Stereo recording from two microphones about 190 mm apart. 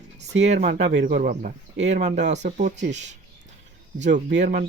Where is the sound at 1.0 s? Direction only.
45° right (ahead or behind).